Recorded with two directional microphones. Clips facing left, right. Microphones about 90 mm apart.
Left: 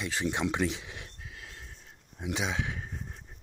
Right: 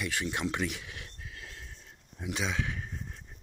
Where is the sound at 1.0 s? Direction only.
5° left (ahead or behind).